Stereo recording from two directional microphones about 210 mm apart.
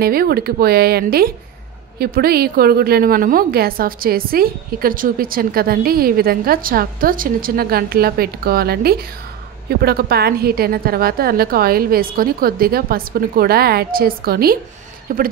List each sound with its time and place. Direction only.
0.0 s a woman's voice: 45° right (ahead or behind)